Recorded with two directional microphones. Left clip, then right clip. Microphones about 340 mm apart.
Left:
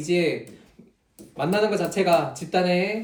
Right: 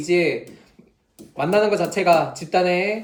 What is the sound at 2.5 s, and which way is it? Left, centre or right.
Speech, centre.